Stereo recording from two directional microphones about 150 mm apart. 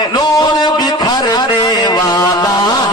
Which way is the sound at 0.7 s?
25° left (ahead or behind).